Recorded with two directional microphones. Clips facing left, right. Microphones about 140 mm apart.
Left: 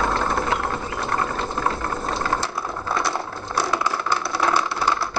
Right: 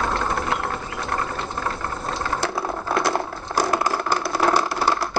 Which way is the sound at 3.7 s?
45° right (ahead or behind).